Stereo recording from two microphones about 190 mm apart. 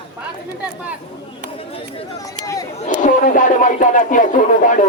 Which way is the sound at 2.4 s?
15° left (ahead or behind).